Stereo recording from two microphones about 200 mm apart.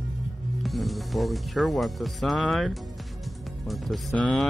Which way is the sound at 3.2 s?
Centre (ahead or behind).